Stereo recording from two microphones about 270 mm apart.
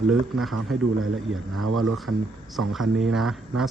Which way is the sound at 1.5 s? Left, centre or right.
Right.